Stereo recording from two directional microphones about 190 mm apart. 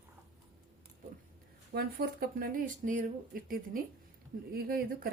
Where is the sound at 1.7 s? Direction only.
55° right (ahead or behind).